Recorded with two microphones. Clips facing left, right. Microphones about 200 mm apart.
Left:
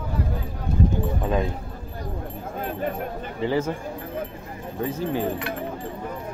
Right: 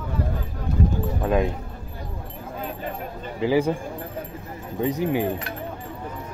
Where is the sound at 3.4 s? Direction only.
10° right (ahead or behind).